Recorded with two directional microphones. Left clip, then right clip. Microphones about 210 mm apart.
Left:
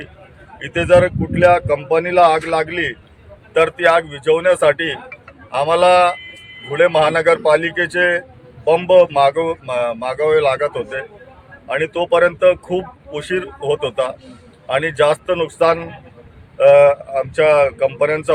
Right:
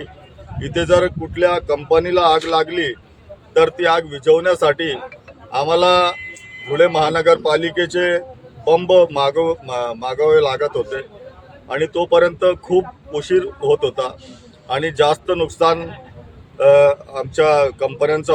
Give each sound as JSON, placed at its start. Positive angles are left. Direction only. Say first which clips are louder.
{"t": 0.6, "sound": "a man's voice", "louder": "left 3 dB", "side_deg": -10}